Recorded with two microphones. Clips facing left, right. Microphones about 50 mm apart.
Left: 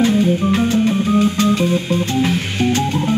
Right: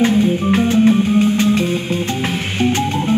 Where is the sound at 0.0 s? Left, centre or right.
Right.